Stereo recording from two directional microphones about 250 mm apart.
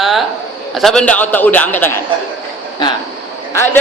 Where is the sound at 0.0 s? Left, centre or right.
Centre.